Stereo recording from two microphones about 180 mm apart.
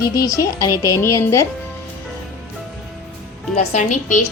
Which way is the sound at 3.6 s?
45° left (ahead or behind).